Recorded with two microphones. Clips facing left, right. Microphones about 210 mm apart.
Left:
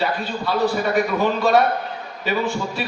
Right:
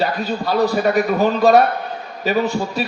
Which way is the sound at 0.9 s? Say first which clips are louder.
Right 3 dB; 40° right (ahead or behind).